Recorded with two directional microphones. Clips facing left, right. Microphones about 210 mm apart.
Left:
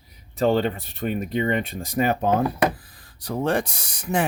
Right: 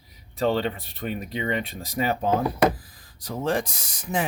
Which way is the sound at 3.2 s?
65° left (ahead or behind).